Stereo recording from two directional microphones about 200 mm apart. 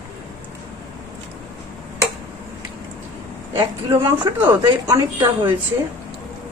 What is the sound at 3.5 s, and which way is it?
A woman's voice, 15° right (ahead or behind).